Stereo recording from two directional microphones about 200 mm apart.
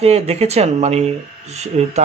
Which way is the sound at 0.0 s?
30° right (ahead or behind).